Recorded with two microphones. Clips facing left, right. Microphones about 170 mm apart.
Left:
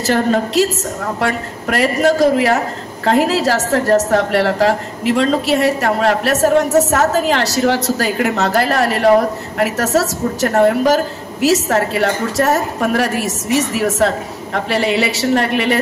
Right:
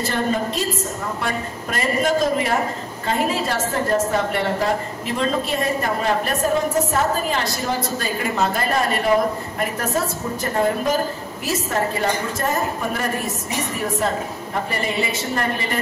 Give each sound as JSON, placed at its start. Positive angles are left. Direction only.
{"t": 0.0, "sound": "a woman's voice", "side_deg": 85}